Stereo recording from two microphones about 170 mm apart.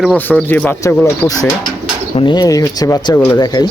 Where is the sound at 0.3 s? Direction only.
10° left (ahead or behind).